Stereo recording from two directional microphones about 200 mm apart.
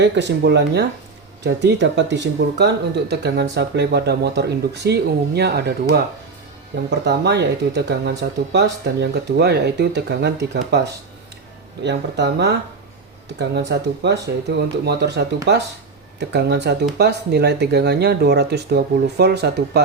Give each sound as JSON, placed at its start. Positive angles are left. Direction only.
{"t": 0.0, "sound": "speech", "side_deg": -60}
{"t": 7.0, "sound": "speech", "side_deg": -55}
{"t": 16.3, "sound": "speech", "side_deg": -55}